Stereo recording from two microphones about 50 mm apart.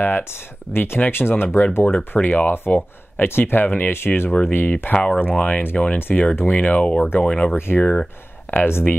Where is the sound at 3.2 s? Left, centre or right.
Left.